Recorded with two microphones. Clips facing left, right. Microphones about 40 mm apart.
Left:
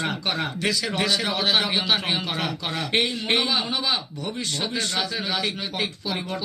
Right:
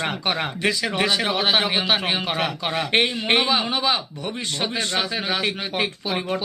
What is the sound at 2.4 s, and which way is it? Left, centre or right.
Speech, right.